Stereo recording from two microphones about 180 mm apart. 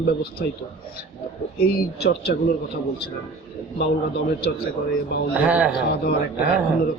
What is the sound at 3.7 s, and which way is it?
Speech, 65° left (ahead or behind).